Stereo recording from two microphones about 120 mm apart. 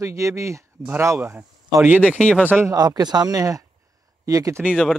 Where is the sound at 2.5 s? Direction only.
15° right (ahead or behind).